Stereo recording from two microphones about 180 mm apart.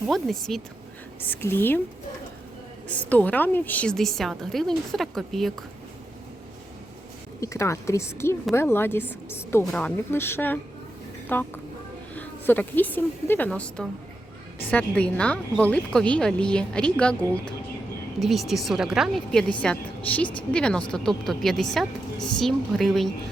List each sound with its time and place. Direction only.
0.1 s a woman's voice: centre (ahead or behind)
2.9 s speech: 10° left (ahead or behind)
7.4 s a woman's voice: 15° left (ahead or behind); by 23.0 s centre (ahead or behind)